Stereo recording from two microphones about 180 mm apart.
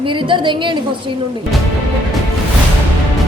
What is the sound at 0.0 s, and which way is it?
A woman's voice, 25° right (ahead or behind).